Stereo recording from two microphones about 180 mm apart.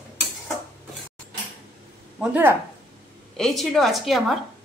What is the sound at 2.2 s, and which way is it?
A woman's voice, 10° right (ahead or behind).